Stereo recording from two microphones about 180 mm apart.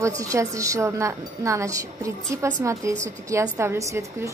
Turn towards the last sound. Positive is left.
turn(degrees=-15)  # may be behind; listen again after turning